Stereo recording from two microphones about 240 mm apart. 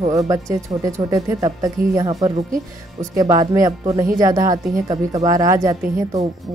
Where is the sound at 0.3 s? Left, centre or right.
Centre.